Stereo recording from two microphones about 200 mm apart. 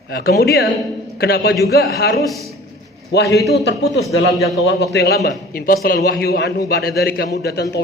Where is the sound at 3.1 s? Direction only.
55° left (ahead or behind).